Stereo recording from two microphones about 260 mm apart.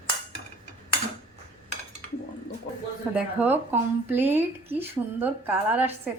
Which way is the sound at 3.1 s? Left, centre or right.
Centre.